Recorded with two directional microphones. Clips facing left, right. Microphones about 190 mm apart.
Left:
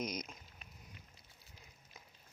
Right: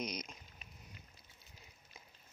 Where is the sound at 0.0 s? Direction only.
50° left (ahead or behind).